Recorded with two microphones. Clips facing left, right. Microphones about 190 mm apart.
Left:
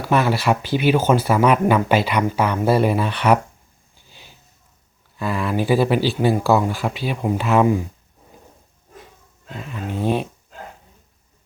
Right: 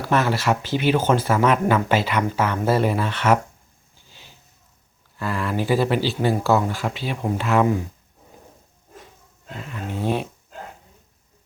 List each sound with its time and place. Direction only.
0.1 s speech: 15° left (ahead or behind)
4.0 s a sound: 15° left (ahead or behind)
5.1 s speech: 15° left (ahead or behind)
9.9 s speech: 15° left (ahead or behind)